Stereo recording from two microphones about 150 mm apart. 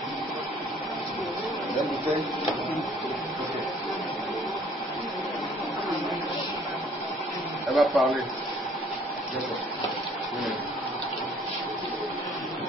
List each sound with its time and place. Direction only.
7.7 s speech: centre (ahead or behind)